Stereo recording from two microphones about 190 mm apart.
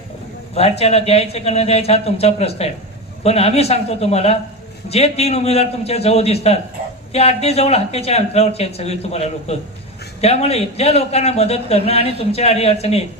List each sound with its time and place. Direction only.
0.5 s a man's voice: 35° left (ahead or behind)